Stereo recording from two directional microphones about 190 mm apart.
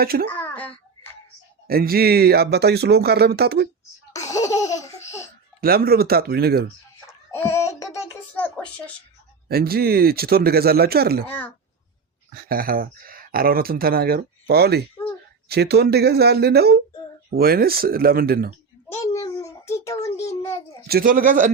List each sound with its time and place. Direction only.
0.0 s speech: 50° right (ahead or behind)
0.3 s babbling: 10° left (ahead or behind)
1.6 s speech: 50° right (ahead or behind)
4.1 s laughter: 15° left (ahead or behind)
5.5 s speech: 50° right (ahead or behind)
7.3 s a sound: 15° left (ahead or behind)
9.5 s speech: 55° right (ahead or behind)
11.3 s speech: 10° left (ahead or behind)
12.3 s speech: 50° right (ahead or behind)
15.0 s a sound: 15° left (ahead or behind)
15.4 s speech: 60° right (ahead or behind)
18.9 s a sound: 15° left (ahead or behind)
20.8 s speech: 50° right (ahead or behind)